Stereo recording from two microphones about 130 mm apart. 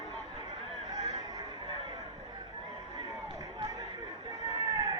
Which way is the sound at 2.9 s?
30° right (ahead or behind).